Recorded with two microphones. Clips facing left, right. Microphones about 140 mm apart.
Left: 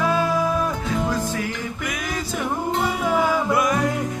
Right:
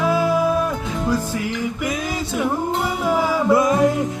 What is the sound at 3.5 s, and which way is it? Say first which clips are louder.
Music: right 5 dB; 25° right (ahead or behind).